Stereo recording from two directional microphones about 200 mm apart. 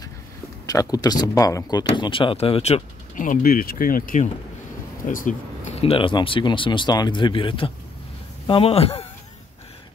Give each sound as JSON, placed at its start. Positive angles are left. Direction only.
{"t": 0.7, "sound": "speech", "side_deg": 20}
{"t": 5.8, "sound": "speech", "side_deg": 30}